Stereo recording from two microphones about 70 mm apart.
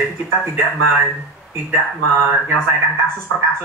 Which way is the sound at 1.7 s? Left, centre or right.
Right.